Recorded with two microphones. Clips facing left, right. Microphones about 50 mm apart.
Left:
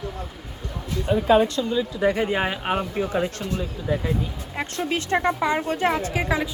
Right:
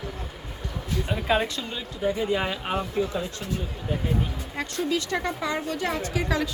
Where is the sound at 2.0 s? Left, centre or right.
Left.